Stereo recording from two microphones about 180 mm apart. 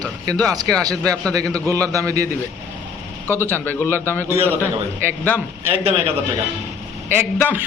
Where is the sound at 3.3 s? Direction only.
10° left (ahead or behind).